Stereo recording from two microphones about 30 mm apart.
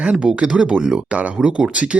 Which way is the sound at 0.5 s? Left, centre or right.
Right.